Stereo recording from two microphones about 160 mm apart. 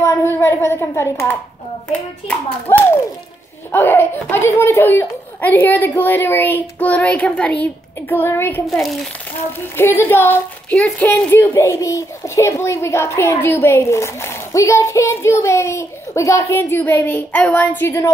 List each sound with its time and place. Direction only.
0.0 s a woman's voice: 15° left (ahead or behind)
8.6 s a child's voice: centre (ahead or behind)
9.8 s a woman's voice: 15° left (ahead or behind)